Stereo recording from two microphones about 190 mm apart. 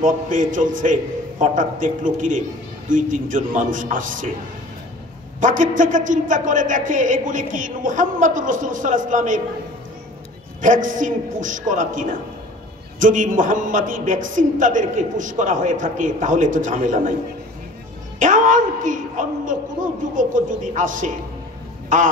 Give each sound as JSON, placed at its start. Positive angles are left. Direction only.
{"t": 0.0, "sound": "a man's voice", "side_deg": -45}
{"t": 5.4, "sound": "a man's voice", "side_deg": -45}
{"t": 10.6, "sound": "a man's voice", "side_deg": -45}
{"t": 18.2, "sound": "a man's voice", "side_deg": -45}
{"t": 21.8, "sound": "a sound", "side_deg": -45}